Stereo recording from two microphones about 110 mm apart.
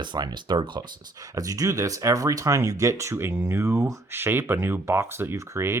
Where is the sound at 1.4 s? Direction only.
35° right (ahead or behind).